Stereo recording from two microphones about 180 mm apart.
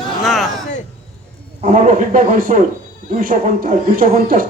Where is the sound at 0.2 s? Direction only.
Centre (ahead or behind).